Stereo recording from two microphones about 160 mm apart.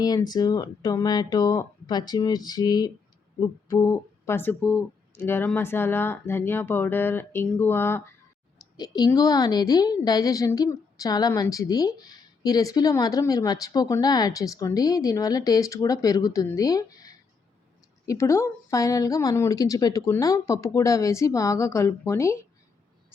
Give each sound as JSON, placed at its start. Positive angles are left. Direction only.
{"t": 0.0, "sound": "a woman's voice", "side_deg": 25}
{"t": 8.7, "sound": "a woman's voice", "side_deg": 25}